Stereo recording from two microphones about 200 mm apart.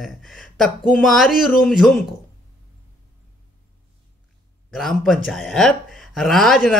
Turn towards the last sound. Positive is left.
turn(degrees=0)  # may be behind; listen again after turning